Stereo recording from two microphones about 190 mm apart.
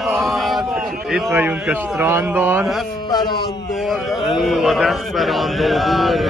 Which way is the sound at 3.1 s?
20° left (ahead or behind).